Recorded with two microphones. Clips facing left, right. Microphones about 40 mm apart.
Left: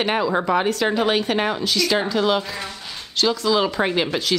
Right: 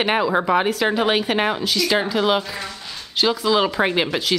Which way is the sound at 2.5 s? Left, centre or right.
Centre.